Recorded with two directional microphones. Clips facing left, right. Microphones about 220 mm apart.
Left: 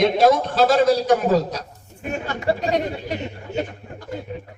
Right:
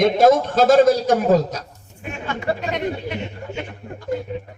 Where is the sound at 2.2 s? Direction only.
40° left (ahead or behind).